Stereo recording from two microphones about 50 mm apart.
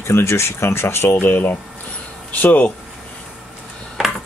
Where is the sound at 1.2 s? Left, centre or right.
Left.